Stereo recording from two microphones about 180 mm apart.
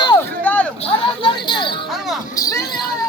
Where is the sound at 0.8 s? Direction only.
30° left (ahead or behind).